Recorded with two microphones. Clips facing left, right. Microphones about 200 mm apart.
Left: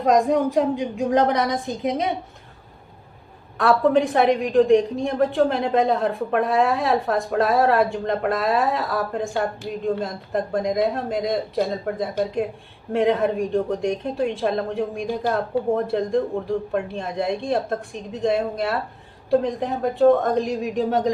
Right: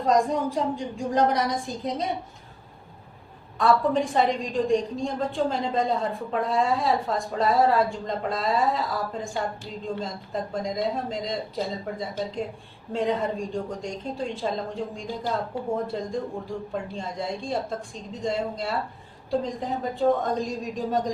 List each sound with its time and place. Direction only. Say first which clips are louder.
0.0 s a woman's voice: left 4 dB; 70° left (ahead or behind)
3.6 s a woman's voice: left 4 dB; 65° left (ahead or behind)